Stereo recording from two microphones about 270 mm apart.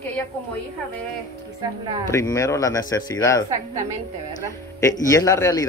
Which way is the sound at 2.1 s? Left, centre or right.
Centre.